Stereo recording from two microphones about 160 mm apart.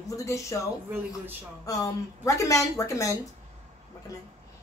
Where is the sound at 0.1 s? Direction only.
20° left (ahead or behind).